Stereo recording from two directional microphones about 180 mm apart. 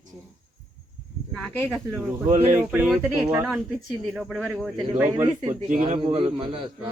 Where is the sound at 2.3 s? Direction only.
45° right (ahead or behind).